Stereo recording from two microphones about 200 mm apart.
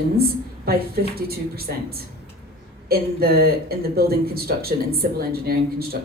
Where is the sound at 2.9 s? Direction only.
50° right (ahead or behind).